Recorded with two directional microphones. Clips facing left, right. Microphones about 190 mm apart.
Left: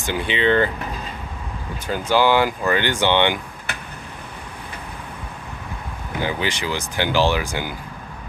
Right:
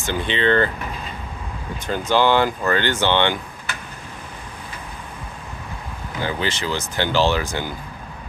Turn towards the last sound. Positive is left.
turn(degrees=10)  # may be behind; listen again after turning